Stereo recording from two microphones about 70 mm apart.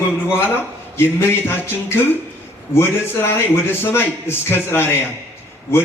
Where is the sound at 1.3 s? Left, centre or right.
Left.